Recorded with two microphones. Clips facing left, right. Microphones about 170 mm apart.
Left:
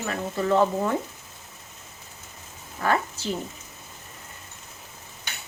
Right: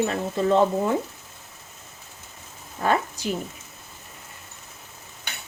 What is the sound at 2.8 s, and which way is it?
Speech, 20° right (ahead or behind).